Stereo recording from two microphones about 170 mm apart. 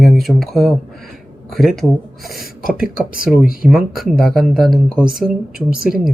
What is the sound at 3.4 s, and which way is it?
Speech, 55° left (ahead or behind).